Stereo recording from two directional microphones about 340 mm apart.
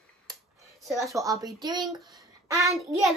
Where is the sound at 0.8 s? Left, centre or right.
Centre.